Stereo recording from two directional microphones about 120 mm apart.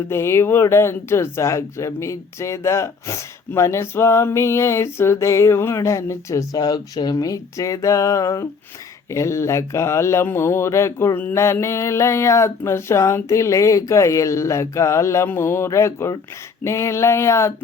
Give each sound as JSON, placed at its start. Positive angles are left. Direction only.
{"t": 0.1, "sound": "speech", "side_deg": 20}